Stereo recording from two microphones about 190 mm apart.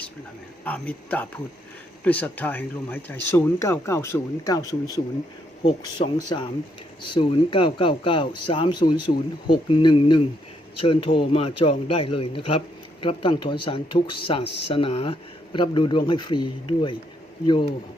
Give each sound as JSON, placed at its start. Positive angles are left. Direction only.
{"t": 0.6, "sound": "a man's voice", "side_deg": 10}